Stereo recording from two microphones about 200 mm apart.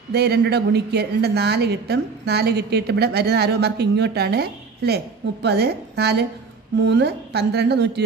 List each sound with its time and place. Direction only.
0.1 s a woman's voice: 55° right (ahead or behind)